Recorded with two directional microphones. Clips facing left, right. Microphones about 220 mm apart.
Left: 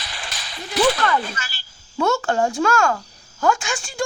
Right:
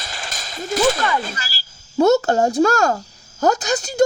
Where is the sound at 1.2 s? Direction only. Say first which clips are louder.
Right 1 dB; 40° right (ahead or behind).